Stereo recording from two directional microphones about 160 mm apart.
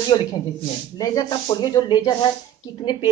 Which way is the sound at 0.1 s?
25° left (ahead or behind).